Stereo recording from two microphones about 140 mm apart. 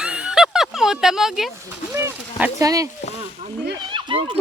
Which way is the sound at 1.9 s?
15° right (ahead or behind).